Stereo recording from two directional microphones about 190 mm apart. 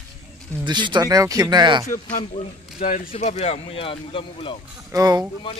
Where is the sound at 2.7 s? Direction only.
45° left (ahead or behind).